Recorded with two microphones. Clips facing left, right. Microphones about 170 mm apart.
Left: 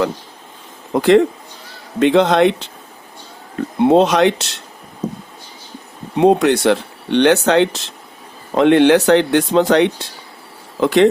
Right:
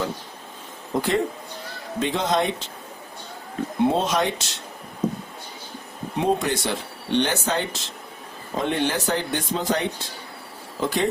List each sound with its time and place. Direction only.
0.9 s speech: 80° left
2.0 s speech: 70° left (ahead or behind)
3.8 s speech: 70° left (ahead or behind)
6.1 s speech: 70° left (ahead or behind)
8.5 s speech: 80° left